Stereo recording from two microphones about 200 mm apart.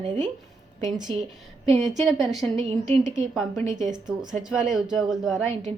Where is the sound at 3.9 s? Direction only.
20° right (ahead or behind).